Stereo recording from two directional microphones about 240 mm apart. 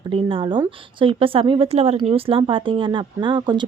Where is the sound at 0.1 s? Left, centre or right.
Right.